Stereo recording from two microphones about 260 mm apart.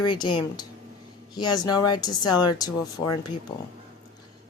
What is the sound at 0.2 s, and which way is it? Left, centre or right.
Speech, centre.